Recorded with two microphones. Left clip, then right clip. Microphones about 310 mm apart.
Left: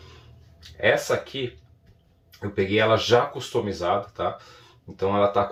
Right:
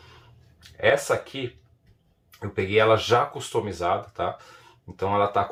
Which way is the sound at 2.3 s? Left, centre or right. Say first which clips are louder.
Right 1 dB; centre.